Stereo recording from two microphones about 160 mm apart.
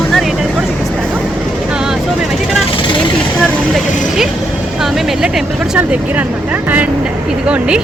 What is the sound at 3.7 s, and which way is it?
Speech, centre (ahead or behind).